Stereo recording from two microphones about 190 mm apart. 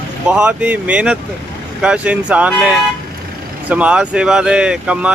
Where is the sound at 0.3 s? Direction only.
5° right (ahead or behind).